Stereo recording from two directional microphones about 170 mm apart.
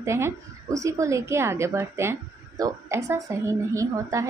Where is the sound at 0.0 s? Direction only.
15° right (ahead or behind).